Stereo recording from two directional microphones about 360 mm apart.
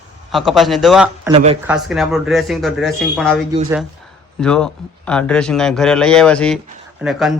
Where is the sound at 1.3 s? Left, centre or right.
Centre.